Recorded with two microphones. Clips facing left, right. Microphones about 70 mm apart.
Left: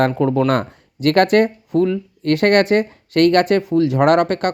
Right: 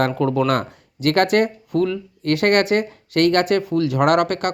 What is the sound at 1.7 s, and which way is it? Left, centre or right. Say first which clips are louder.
Speech: left 3 dB; left.